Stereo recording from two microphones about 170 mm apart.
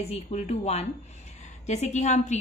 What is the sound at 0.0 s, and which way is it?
A woman's voice, 40° left (ahead or behind).